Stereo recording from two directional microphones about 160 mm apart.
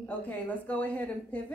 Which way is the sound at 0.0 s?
10° left (ahead or behind).